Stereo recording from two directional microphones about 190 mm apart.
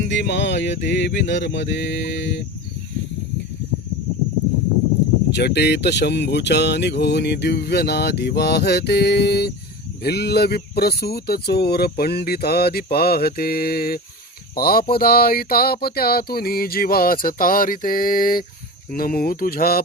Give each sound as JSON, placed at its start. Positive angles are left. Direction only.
{"t": 0.1, "sound": "mantra", "side_deg": 65}
{"t": 5.3, "sound": "speech", "side_deg": 60}
{"t": 14.5, "sound": "a sound", "side_deg": 50}